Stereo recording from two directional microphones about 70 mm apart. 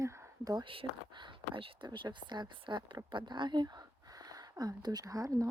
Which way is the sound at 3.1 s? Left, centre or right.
Right.